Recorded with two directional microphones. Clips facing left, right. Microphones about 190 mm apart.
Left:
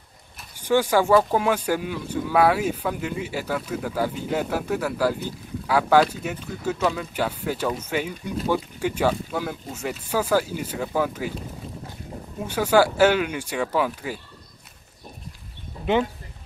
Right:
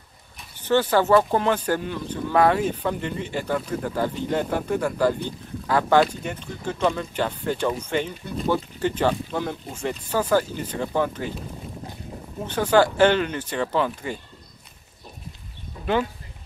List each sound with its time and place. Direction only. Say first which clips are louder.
0.4 s speech: even; 10° left (ahead or behind)
12.4 s speech: even; 10° left (ahead or behind)
15.8 s speech: left 2 dB; 20° left (ahead or behind)